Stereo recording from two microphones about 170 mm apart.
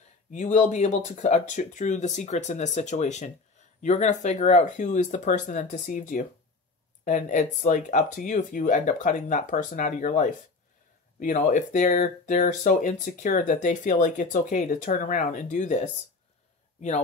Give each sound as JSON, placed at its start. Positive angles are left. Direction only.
{"t": 0.3, "sound": "speech", "side_deg": 45}